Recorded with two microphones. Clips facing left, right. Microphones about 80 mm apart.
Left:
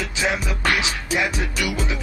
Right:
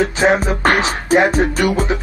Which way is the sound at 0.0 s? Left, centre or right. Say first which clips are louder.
Right 10 dB; right.